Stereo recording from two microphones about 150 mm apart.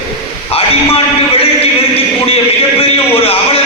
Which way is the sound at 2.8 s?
40° left (ahead or behind).